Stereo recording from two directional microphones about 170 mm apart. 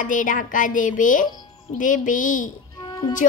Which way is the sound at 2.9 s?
25° left (ahead or behind).